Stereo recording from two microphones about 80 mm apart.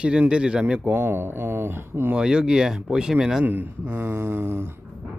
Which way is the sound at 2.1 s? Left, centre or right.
Centre.